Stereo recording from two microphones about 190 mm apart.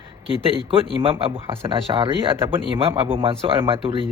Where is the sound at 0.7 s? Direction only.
30° right (ahead or behind).